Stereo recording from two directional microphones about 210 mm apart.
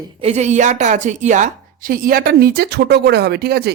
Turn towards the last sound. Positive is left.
turn(degrees=-50)  # may be behind; listen again after turning